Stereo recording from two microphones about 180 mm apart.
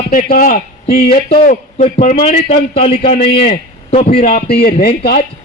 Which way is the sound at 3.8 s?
50° left (ahead or behind).